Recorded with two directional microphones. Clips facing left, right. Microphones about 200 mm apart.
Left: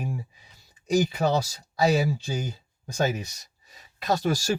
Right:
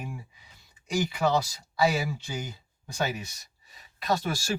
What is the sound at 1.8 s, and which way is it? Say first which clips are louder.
Speech: left 3 dB; 40° left (ahead or behind).